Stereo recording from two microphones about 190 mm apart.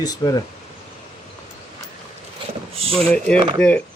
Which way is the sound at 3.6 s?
5° left (ahead or behind).